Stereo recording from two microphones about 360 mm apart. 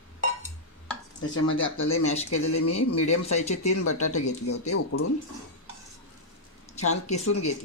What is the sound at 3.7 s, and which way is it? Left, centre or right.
A man's voice, left.